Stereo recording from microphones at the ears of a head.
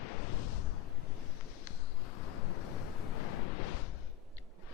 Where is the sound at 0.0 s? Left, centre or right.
Left.